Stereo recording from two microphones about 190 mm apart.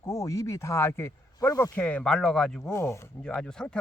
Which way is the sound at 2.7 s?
15° left (ahead or behind).